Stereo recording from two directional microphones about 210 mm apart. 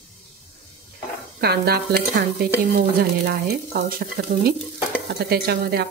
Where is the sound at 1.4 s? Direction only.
50° right (ahead or behind).